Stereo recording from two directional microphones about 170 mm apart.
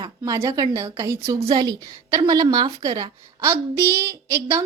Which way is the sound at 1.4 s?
30° right (ahead or behind).